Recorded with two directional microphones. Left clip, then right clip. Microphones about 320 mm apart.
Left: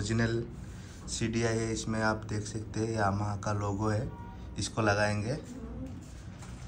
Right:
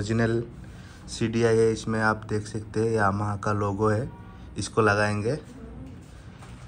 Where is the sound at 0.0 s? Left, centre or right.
Centre.